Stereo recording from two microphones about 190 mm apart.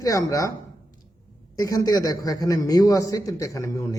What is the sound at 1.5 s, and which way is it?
A man's voice, 20° left (ahead or behind).